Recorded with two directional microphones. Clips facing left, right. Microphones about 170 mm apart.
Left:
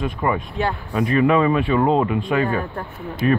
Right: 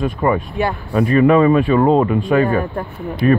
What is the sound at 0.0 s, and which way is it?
Speech, 45° right (ahead or behind).